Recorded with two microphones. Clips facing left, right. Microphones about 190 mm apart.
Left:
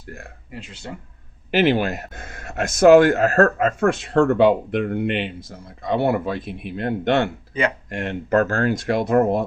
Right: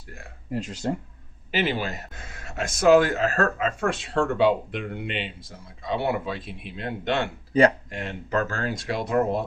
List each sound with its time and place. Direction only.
0.5 s speech: 40° right (ahead or behind)
1.5 s speech: 60° left (ahead or behind)
7.5 s speech: 40° right (ahead or behind)
7.9 s speech: 60° left (ahead or behind)